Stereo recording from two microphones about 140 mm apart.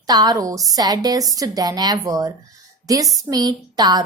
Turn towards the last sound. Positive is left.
turn(degrees=-30)  # may be behind; listen again after turning